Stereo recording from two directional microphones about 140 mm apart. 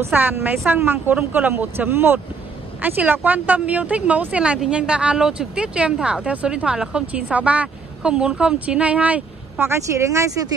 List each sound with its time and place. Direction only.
0.0 s speech: 15° right (ahead or behind)